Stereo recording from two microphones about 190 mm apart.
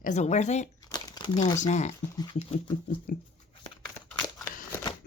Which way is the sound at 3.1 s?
45° left (ahead or behind).